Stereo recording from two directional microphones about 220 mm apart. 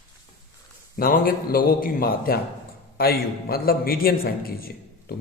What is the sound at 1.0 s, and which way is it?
A man's voice, 40° left (ahead or behind).